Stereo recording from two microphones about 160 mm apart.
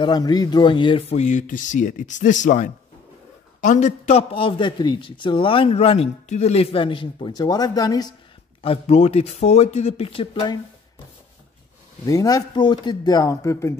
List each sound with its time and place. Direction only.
0.0 s a man's voice: 25° left (ahead or behind)
8.6 s a man's voice: 40° left (ahead or behind)
12.1 s speech: 20° left (ahead or behind)